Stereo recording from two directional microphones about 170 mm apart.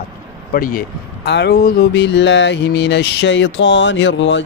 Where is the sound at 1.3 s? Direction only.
80° left.